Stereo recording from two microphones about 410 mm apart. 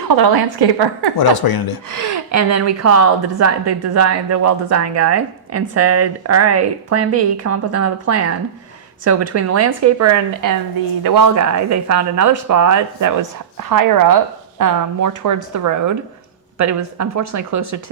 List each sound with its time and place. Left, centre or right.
0.1 s a woman's voice: right
1.1 s speech: left
1.9 s a woman's voice: right
11.0 s speech: right